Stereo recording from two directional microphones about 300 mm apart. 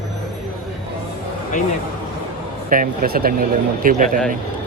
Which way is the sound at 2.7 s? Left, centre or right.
Right.